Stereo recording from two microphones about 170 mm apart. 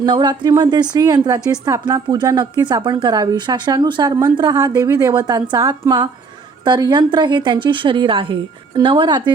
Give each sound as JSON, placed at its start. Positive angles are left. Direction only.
{"t": 0.0, "sound": "a woman's voice", "side_deg": -25}